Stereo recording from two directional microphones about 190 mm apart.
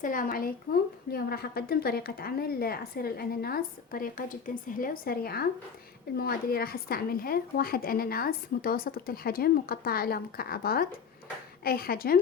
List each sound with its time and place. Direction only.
0.0 s a woman's voice: 45° left (ahead or behind)